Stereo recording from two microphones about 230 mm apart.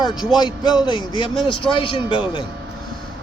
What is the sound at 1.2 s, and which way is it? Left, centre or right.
Speech, left.